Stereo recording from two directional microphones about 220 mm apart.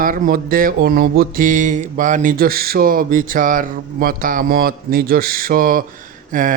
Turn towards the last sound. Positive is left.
turn(degrees=-35)  # may be behind; listen again after turning